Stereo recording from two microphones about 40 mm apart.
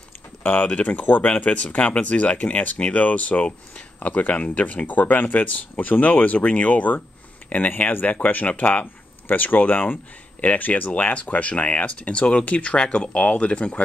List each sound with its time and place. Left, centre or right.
0.6 s speech: left
4.8 s speech: left